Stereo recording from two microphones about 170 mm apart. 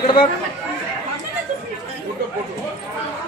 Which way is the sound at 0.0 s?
25° left (ahead or behind).